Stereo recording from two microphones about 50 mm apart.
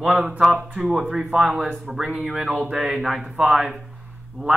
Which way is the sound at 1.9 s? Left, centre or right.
Centre.